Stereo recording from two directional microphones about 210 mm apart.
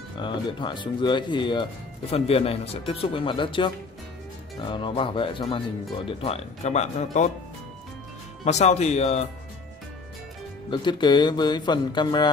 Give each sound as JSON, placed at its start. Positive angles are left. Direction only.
{"t": 0.2, "sound": "speech", "side_deg": 20}
{"t": 8.5, "sound": "speech", "side_deg": 30}
{"t": 10.7, "sound": "speech", "side_deg": 20}